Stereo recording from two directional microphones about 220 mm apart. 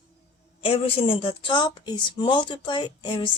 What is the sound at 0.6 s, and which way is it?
A woman's voice, 25° left (ahead or behind).